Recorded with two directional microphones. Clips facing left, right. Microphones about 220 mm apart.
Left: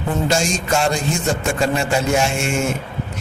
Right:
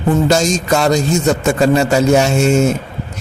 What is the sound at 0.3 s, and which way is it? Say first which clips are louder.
A man's voice: right 6 dB; 40° right (ahead or behind).